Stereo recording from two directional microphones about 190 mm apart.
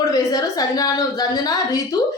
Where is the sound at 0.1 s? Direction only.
20° left (ahead or behind).